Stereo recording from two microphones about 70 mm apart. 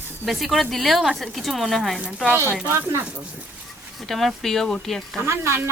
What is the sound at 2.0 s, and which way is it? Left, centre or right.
Speech, centre.